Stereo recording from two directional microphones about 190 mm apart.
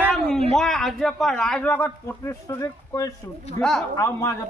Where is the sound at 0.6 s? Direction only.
Centre (ahead or behind).